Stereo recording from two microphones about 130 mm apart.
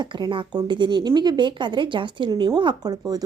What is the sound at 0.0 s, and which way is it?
Speech, 35° right (ahead or behind).